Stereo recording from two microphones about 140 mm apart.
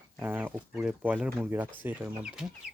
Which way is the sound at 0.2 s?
15° right (ahead or behind).